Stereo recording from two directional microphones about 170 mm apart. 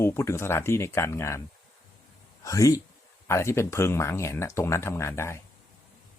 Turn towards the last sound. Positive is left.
turn(degrees=15)  # may be behind; listen again after turning